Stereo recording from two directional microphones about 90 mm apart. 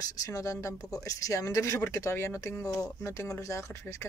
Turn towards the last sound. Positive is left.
turn(degrees=35)  # may be behind; listen again after turning